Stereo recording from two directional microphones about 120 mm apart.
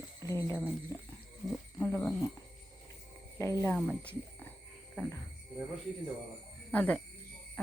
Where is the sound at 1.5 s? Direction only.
10° left (ahead or behind).